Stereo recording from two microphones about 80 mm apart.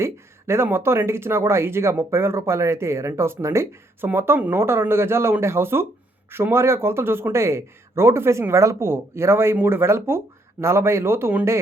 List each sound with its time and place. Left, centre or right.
0.0 s speech: right
4.6 s speech: right